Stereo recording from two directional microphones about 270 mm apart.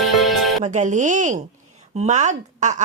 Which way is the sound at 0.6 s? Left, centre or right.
Right.